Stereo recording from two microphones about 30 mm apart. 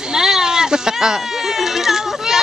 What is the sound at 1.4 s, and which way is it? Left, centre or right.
Baby cry, centre.